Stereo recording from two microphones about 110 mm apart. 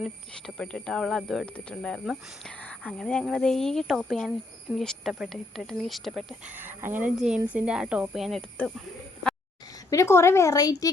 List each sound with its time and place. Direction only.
0.0 s speech: 5° left (ahead or behind)
6.4 s speech: 15° right (ahead or behind); by 8.4 s centre (ahead or behind)
9.9 s a woman's voice: 25° left (ahead or behind)